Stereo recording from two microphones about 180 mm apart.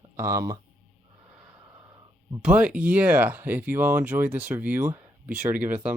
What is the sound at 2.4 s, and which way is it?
Speech, 5° right (ahead or behind).